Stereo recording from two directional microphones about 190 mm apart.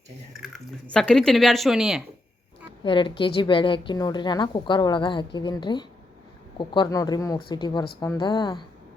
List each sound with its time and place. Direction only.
0.3 s speech: centre (ahead or behind)
2.8 s a woman's voice: 25° left (ahead or behind)